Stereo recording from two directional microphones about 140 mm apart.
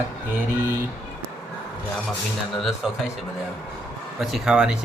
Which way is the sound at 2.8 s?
5° right (ahead or behind).